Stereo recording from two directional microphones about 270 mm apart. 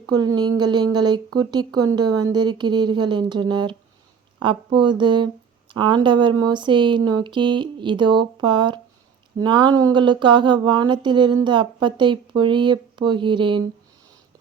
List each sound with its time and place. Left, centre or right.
0.1 s speech: centre